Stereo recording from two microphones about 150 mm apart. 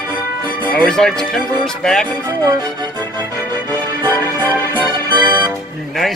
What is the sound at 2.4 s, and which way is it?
Music, 25° right (ahead or behind).